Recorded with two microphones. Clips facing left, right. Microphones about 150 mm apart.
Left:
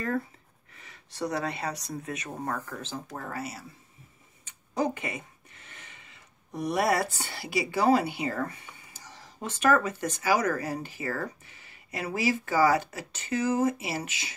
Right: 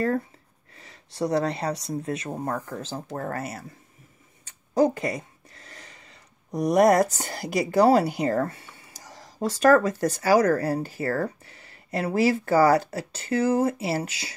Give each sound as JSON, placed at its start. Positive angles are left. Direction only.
{"t": 0.7, "sound": "speech", "side_deg": -30}
{"t": 3.2, "sound": "speech", "side_deg": -50}
{"t": 4.5, "sound": "speech", "side_deg": -40}
{"t": 13.9, "sound": "speech", "side_deg": -35}